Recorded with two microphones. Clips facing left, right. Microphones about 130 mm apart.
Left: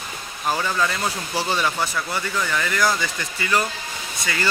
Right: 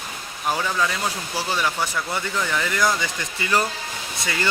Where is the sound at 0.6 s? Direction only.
5° right (ahead or behind).